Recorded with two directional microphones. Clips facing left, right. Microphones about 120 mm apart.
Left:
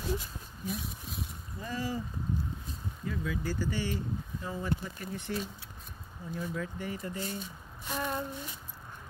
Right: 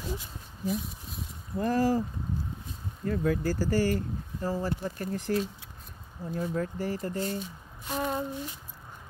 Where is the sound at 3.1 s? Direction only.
45° right (ahead or behind).